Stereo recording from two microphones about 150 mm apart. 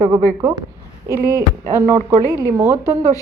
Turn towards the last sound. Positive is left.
turn(degrees=-20)  # may be behind; listen again after turning